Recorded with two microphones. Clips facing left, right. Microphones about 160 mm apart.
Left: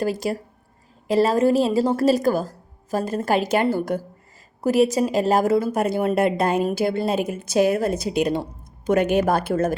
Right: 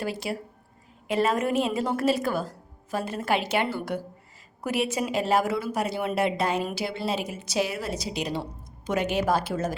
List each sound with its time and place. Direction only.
0.0 s a woman's voice: 40° left (ahead or behind)